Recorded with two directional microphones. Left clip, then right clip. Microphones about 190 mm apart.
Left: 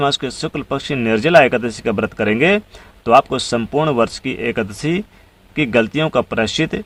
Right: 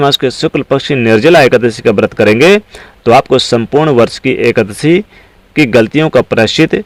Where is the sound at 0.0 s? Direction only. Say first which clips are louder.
Right 9 dB; 30° right (ahead or behind).